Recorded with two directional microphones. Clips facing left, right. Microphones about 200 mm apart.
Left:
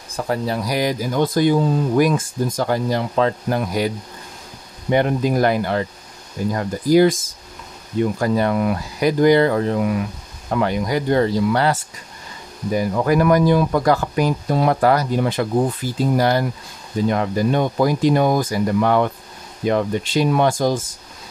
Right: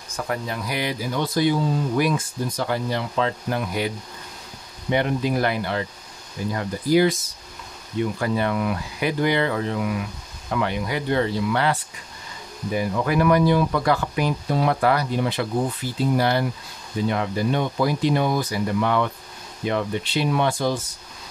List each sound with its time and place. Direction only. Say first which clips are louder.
0.1 s speech: left 6 dB; 35° left (ahead or behind)
4.9 s speech: left 4 dB; 45° left (ahead or behind)